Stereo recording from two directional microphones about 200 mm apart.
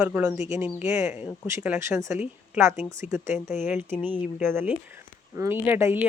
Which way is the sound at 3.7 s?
10° right (ahead or behind).